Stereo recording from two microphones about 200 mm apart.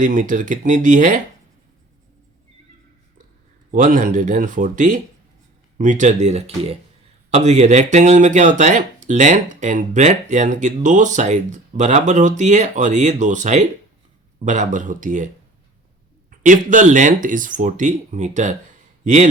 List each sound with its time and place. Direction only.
0.0 s speech: 40° right (ahead or behind)
3.7 s speech: 40° right (ahead or behind)
16.4 s a man's voice: 40° right (ahead or behind)